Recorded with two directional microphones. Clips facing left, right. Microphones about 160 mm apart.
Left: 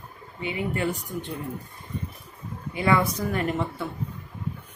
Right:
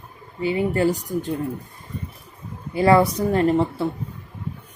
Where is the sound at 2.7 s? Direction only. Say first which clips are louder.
Right 7 dB; 35° right (ahead or behind).